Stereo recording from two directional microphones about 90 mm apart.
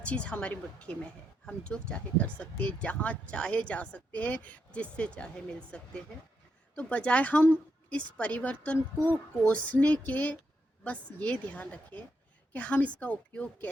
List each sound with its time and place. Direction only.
0.0 s speech: 15° left (ahead or behind)